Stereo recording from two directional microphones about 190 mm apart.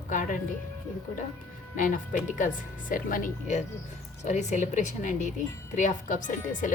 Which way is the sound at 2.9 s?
45° left (ahead or behind).